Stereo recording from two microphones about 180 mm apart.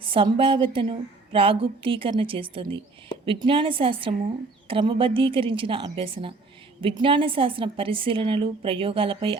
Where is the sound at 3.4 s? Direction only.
30° right (ahead or behind).